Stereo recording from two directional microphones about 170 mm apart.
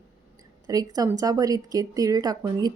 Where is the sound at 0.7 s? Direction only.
20° right (ahead or behind).